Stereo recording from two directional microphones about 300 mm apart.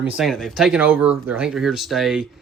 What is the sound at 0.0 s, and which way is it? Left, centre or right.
Speech, centre.